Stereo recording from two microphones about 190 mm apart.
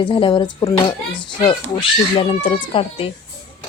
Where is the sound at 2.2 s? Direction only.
25° left (ahead or behind).